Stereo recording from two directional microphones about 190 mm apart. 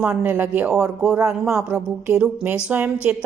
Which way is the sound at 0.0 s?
10° right (ahead or behind).